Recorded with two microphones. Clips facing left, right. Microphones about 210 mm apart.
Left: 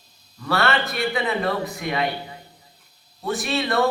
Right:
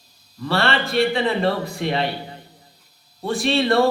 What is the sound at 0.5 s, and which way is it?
A man's voice, 30° right (ahead or behind).